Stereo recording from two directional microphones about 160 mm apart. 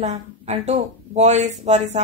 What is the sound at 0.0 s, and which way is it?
Speech, 45° right (ahead or behind).